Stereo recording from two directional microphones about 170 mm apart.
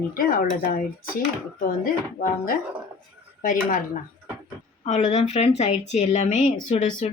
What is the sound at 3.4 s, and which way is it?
Speech, 50° left (ahead or behind).